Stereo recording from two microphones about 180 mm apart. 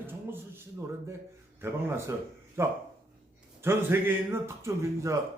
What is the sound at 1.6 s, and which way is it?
Speech, 15° right (ahead or behind).